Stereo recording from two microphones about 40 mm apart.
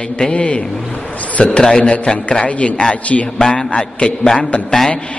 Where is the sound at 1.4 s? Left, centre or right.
Left.